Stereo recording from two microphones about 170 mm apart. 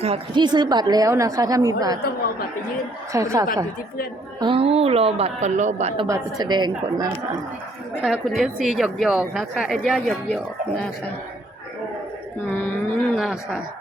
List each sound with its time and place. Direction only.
0.0 s a woman's voice: 30° right (ahead or behind)
3.1 s a woman's voice: 20° right (ahead or behind)
4.4 s a woman's voice: 30° right (ahead or behind)
6.1 s a woman's voice: 20° right (ahead or behind)
8.0 s a woman's voice: centre (ahead or behind)
12.5 s a woman's voice: 10° left (ahead or behind)